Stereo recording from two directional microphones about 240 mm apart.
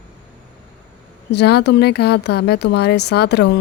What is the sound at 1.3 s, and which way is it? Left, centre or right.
Speech, left.